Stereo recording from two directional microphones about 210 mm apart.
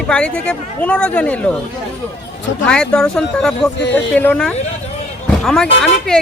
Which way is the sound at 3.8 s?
60° left (ahead or behind).